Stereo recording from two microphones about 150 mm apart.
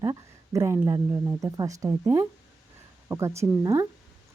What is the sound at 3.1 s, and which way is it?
Speech, 20° right (ahead or behind).